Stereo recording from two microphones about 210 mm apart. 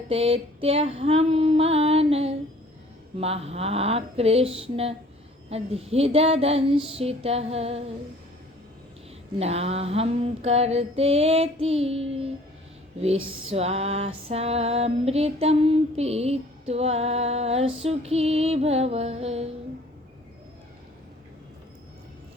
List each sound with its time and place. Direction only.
0.1 s female singing: 25° right (ahead or behind)
9.4 s female singing: 30° right (ahead or behind)
13.5 s female singing: 30° right (ahead or behind)